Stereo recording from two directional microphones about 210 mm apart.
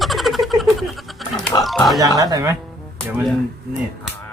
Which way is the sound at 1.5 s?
15° left (ahead or behind).